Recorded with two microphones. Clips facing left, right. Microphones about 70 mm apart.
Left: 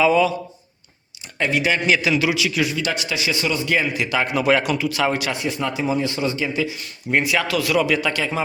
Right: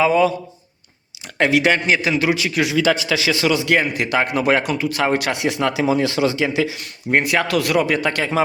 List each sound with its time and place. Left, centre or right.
0.0 s a man's voice: right
1.4 s speech: right
1.9 s a man's voice: right
3.2 s a man's voice: right
3.8 s speech: right
5.9 s speech: right